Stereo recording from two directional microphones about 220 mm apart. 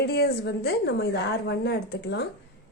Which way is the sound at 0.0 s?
45° left (ahead or behind).